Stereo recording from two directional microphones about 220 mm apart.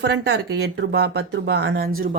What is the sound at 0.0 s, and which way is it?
Speech, 50° right (ahead or behind).